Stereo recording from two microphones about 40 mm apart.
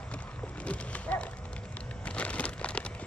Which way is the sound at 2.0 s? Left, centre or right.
Left.